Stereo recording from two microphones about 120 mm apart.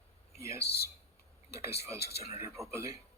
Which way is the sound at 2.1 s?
60° left (ahead or behind).